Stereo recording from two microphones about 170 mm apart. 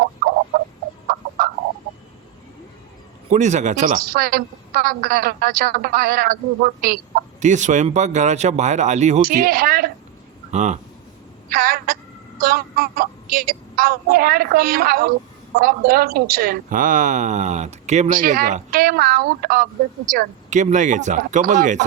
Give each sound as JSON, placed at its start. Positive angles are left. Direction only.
{"t": 3.2, "sound": "a woman's voice", "side_deg": -45}
{"t": 9.2, "sound": "a woman's voice", "side_deg": -60}
{"t": 10.5, "sound": "a woman's voice", "side_deg": -45}
{"t": 11.4, "sound": "a woman's voice", "side_deg": -60}